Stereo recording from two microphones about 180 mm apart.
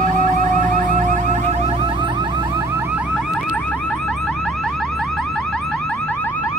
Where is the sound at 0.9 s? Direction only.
45° right (ahead or behind).